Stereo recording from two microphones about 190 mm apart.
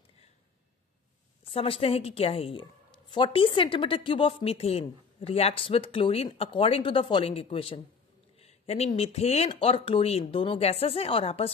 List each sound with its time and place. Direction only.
1.5 s a woman's voice: 30° left (ahead or behind)